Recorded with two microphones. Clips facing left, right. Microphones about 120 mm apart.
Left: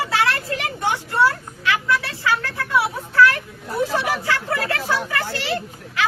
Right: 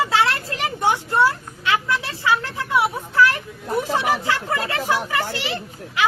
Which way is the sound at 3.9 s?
20° right (ahead or behind).